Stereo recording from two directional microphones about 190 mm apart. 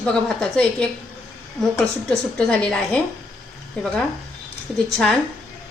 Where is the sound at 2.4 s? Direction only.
5° left (ahead or behind).